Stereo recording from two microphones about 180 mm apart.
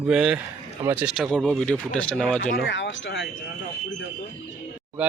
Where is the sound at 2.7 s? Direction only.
90° left.